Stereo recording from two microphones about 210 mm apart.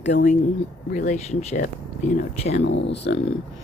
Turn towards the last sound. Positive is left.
turn(degrees=55)  # may be behind; listen again after turning